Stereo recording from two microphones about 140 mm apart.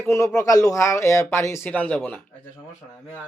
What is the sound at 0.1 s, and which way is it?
Speech, 20° left (ahead or behind).